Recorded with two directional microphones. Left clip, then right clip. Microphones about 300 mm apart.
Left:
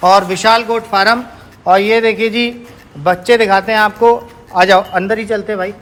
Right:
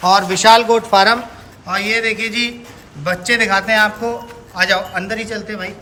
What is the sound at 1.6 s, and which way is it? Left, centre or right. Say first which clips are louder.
A man's voice: left 7 dB; centre.